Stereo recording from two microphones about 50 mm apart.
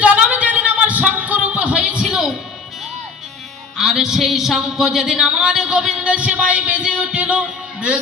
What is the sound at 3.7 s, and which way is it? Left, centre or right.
Speech, centre.